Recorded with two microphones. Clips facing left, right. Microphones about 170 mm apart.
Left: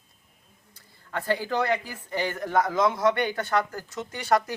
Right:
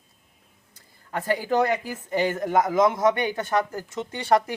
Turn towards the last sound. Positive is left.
turn(degrees=-25)  # may be behind; listen again after turning